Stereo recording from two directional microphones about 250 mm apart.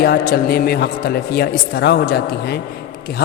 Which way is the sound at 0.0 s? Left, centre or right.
Left.